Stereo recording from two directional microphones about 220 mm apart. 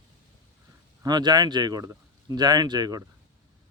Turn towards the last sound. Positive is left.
turn(degrees=-20)  # may be behind; listen again after turning